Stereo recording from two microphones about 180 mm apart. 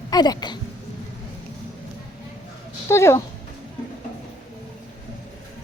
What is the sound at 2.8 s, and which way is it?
Speech, 15° left (ahead or behind).